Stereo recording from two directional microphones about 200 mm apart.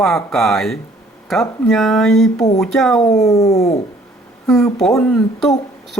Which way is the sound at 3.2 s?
15° left (ahead or behind).